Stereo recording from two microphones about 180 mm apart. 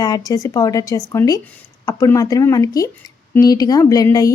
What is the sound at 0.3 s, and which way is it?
A woman's voice, 20° left (ahead or behind).